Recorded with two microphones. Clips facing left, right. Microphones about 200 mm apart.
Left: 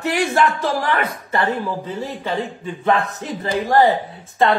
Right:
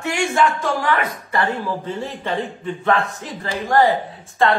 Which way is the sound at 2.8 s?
20° left (ahead or behind).